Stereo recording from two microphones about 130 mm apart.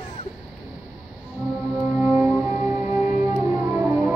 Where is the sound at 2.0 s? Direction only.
10° right (ahead or behind).